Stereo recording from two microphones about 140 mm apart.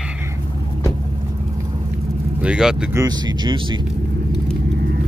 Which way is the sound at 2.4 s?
5° right (ahead or behind).